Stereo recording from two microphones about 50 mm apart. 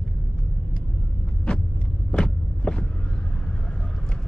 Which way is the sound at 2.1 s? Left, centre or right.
Centre.